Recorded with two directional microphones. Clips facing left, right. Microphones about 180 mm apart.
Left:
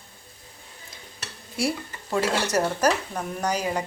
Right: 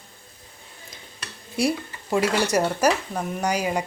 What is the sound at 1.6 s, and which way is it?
Dishes, 15° right (ahead or behind).